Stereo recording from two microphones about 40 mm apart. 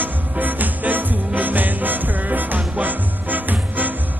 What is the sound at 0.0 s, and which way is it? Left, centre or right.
Music, right.